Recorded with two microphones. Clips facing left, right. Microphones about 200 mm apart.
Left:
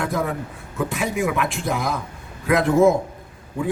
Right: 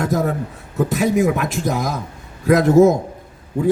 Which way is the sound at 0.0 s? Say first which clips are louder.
Right 4 dB; 40° right (ahead or behind).